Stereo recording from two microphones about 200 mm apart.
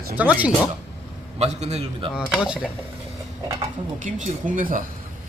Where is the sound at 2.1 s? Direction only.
5° right (ahead or behind).